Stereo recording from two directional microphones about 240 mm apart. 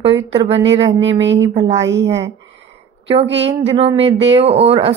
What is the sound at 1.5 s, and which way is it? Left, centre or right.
Speech, right.